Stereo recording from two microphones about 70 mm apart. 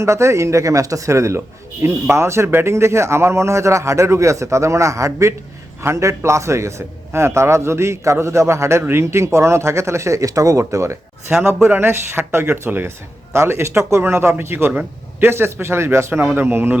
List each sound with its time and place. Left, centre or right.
0.0 s speech: right
11.3 s speech: centre
11.7 s a man's voice: right
14.7 s a man's voice: right
15.3 s a man's voice: right